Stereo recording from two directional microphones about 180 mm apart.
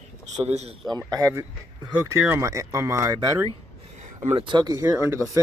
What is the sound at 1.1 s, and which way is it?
Speech, 15° right (ahead or behind).